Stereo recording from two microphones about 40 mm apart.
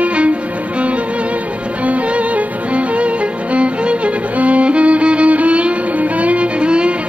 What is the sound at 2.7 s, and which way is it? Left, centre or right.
Music, right.